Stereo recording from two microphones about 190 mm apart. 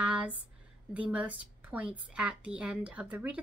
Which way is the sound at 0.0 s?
5° right (ahead or behind).